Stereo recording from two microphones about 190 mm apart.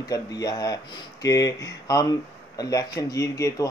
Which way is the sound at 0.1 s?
20° left (ahead or behind).